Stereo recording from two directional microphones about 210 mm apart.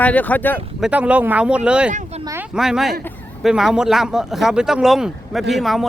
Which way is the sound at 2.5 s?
Centre (ahead or behind).